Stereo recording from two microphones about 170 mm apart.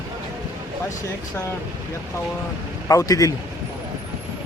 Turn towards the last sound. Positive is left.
turn(degrees=20)  # may be behind; listen again after turning